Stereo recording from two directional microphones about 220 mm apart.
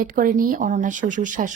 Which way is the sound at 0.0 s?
40° right (ahead or behind).